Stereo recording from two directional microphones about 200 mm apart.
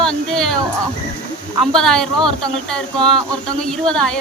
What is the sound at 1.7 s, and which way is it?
Speech, 5° left (ahead or behind).